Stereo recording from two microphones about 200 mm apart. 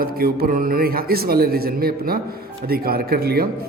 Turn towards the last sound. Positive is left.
turn(degrees=-50)  # may be behind; listen again after turning